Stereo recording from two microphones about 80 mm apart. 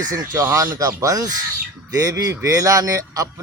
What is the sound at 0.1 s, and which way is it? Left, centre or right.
Speech, right.